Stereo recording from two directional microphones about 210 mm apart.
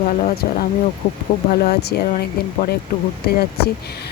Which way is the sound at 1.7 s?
50° left (ahead or behind).